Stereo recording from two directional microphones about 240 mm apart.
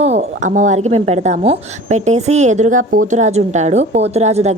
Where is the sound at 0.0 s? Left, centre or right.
Right.